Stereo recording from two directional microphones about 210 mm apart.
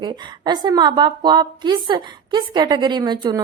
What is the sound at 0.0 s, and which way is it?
A woman's voice, 20° right (ahead or behind).